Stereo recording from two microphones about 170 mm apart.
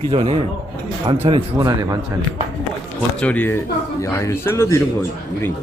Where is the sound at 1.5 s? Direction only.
25° right (ahead or behind).